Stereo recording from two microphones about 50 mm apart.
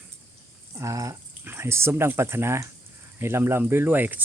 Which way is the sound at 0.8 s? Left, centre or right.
Right.